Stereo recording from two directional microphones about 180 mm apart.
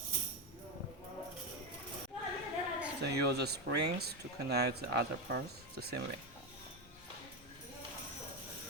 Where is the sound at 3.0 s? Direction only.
65° right (ahead or behind).